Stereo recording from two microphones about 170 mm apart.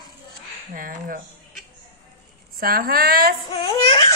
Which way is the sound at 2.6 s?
60° right (ahead or behind).